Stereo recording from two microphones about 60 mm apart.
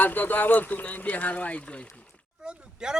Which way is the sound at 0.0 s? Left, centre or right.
Left.